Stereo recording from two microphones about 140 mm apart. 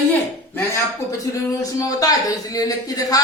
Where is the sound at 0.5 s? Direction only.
20° left (ahead or behind).